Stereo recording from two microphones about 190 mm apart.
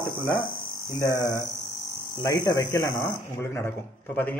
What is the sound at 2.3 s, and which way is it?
Speech, 20° left (ahead or behind).